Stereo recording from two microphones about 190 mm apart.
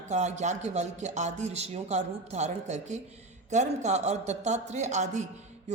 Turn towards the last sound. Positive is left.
turn(degrees=-40)  # may be behind; listen again after turning